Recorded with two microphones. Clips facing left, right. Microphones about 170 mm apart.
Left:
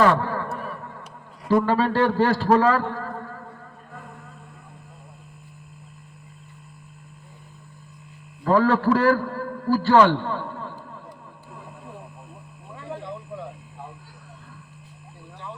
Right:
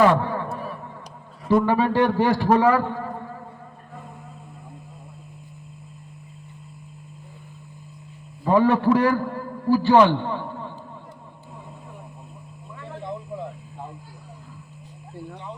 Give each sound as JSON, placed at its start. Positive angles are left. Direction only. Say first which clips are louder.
{"t": 0.0, "sound": "a sound", "louder": "right 1 dB", "side_deg": -15}
{"t": 1.6, "sound": "a man's voice", "louder": "right 1 dB", "side_deg": -15}
{"t": 8.4, "sound": "a man's voice", "louder": "right 1 dB", "side_deg": -15}